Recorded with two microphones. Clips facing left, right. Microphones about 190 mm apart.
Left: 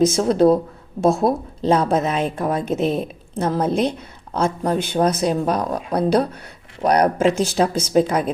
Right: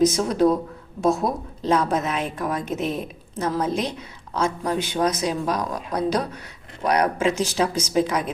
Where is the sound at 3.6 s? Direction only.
60° left (ahead or behind).